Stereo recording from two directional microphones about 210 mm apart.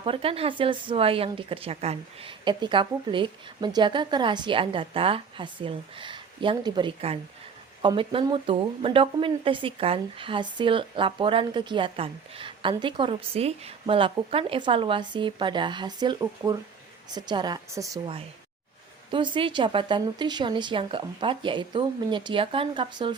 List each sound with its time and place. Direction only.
0.0 s a woman's voice: 25° right (ahead or behind)